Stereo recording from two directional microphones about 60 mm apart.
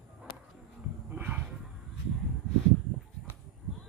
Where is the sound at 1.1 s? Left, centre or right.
Right.